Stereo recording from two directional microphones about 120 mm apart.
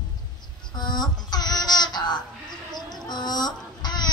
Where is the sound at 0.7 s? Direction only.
35° left (ahead or behind).